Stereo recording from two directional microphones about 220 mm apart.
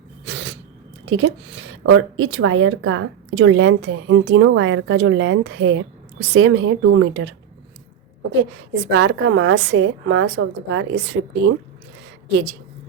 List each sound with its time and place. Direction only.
0.3 s sneeze: 55° right (ahead or behind)
1.1 s speech: 60° right (ahead or behind)
8.7 s speech: 55° right (ahead or behind)